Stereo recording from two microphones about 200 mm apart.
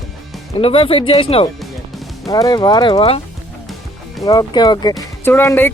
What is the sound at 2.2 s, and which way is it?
Speech, 15° left (ahead or behind).